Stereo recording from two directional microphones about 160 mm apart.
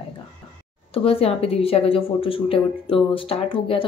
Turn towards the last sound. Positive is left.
turn(degrees=35)  # may be behind; listen again after turning